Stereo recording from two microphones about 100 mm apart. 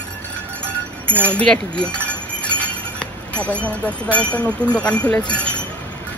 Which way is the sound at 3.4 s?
15° left (ahead or behind).